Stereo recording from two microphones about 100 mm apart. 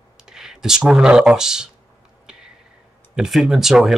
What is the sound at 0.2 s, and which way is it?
Speech, 5° right (ahead or behind).